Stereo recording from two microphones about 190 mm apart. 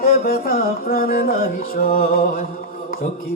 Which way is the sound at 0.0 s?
50° left (ahead or behind).